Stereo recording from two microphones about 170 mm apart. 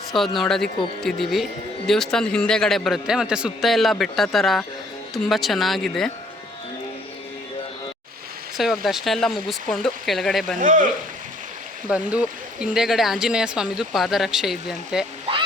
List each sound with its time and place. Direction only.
0.1 s speech: centre (ahead or behind)
8.5 s speech: centre (ahead or behind)
10.6 s speech: 50° right (ahead or behind)
11.9 s speech: 5° right (ahead or behind)